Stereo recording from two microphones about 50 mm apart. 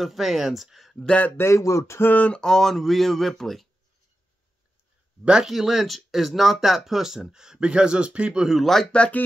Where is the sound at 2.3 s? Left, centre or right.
Centre.